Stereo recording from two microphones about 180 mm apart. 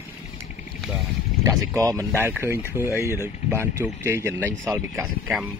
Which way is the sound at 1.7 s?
20° right (ahead or behind).